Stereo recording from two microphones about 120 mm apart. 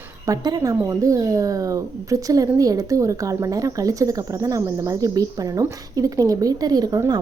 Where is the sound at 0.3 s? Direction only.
30° right (ahead or behind).